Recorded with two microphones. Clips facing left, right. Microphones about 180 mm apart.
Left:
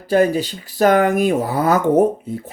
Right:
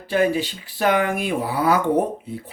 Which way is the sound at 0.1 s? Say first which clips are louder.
Left 4 dB; 40° left (ahead or behind).